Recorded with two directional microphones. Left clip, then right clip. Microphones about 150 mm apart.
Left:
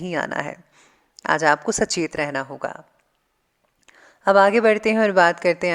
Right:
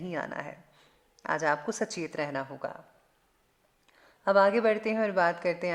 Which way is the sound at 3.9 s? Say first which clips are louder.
Left 9 dB; 40° left (ahead or behind).